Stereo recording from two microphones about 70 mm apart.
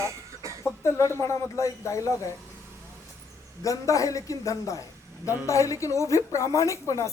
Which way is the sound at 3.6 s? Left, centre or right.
Left.